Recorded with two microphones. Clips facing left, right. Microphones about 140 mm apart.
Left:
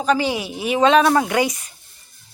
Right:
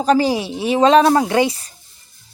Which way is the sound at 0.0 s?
35° right (ahead or behind).